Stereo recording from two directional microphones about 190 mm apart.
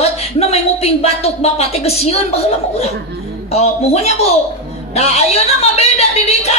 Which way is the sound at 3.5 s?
35° left (ahead or behind).